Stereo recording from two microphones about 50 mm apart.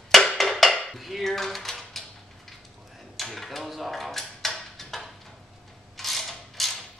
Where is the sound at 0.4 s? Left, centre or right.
Centre.